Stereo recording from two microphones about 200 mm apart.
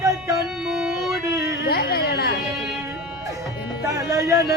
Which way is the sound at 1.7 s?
50° left (ahead or behind).